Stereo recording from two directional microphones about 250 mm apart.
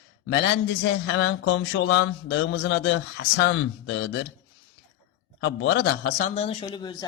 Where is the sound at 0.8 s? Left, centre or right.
Left.